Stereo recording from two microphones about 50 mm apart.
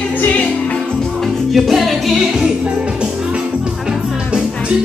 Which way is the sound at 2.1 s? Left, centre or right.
Centre.